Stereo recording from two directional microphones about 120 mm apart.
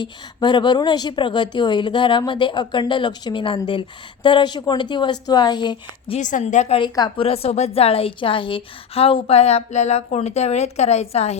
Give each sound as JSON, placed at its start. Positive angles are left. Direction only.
{"t": 0.0, "sound": "a woman's voice", "side_deg": 40}
{"t": 6.1, "sound": "speech", "side_deg": 85}
{"t": 6.7, "sound": "a woman's voice", "side_deg": 35}
{"t": 7.2, "sound": "a woman's voice", "side_deg": 55}